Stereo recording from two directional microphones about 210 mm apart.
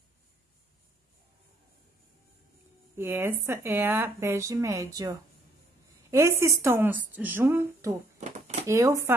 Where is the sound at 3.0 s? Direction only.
10° right (ahead or behind).